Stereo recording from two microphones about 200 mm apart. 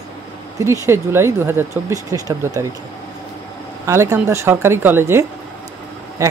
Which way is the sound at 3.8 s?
15° right (ahead or behind).